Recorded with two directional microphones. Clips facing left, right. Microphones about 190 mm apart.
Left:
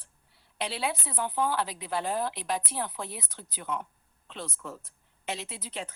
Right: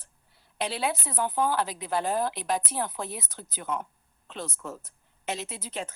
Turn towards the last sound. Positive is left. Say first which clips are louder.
# right 3 dB
turn(degrees=-45)  # may be behind; listen again after turning